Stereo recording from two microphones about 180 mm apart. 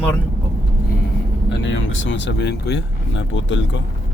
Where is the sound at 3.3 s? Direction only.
90° left.